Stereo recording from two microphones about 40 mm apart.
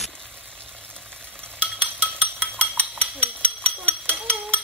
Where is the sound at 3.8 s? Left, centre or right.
Right.